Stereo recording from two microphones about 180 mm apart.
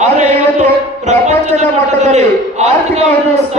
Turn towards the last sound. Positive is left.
turn(degrees=-35)  # may be behind; listen again after turning